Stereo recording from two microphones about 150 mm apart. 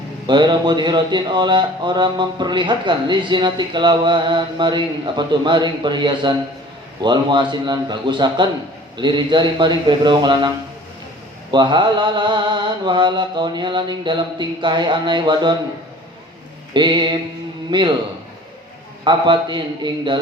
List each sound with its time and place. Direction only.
0.3 s a man's voice: 30° right (ahead or behind)
11.5 s a man's voice: 30° right (ahead or behind)
16.7 s a man's voice: 30° right (ahead or behind)
19.0 s a man's voice: 30° right (ahead or behind)